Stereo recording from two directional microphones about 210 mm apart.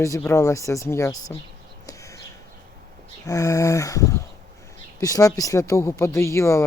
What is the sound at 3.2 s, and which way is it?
Speech, 15° left (ahead or behind).